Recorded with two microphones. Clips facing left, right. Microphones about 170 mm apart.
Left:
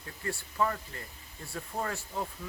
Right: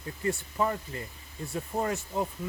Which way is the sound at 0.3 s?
20° right (ahead or behind).